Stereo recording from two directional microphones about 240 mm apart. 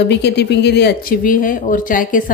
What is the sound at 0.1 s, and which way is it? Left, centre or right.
Speech, left.